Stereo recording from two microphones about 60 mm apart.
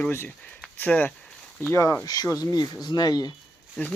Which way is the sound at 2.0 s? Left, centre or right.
Left.